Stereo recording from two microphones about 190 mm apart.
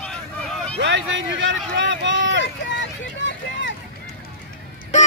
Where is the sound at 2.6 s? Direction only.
70° left (ahead or behind).